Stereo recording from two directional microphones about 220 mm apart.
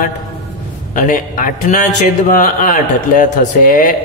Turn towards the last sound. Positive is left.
turn(degrees=40)  # may be behind; listen again after turning